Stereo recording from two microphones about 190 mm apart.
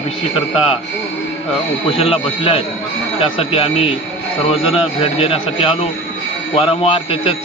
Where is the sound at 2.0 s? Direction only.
30° left (ahead or behind).